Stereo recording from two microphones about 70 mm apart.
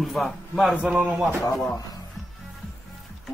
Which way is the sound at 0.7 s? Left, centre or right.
Centre.